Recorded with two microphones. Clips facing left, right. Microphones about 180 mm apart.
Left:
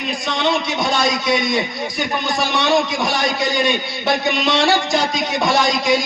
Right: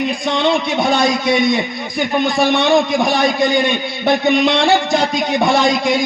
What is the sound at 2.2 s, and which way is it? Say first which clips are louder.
A man's voice: right 6 dB; 55° right (ahead or behind).